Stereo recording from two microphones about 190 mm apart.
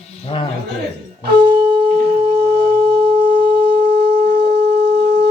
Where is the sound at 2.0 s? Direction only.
60° right (ahead or behind).